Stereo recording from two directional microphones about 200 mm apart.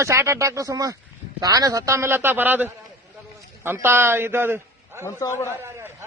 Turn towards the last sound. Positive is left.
turn(degrees=15)  # may be behind; listen again after turning